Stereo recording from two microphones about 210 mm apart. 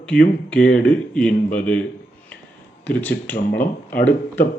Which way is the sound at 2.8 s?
5° left (ahead or behind).